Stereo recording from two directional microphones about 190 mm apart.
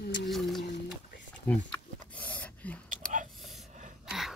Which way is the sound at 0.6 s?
65° left (ahead or behind).